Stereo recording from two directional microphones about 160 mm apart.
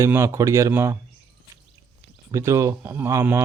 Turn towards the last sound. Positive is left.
turn(degrees=-15)  # may be behind; listen again after turning